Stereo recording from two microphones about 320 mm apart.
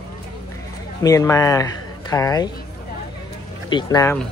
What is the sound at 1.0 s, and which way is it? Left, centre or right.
Speech, centre.